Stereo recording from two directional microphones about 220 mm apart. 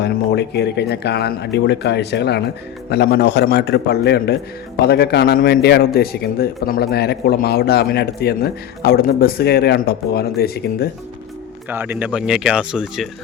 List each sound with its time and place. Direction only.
0.0 s a man's voice: 50° left (ahead or behind)
11.7 s speech: 10° right (ahead or behind)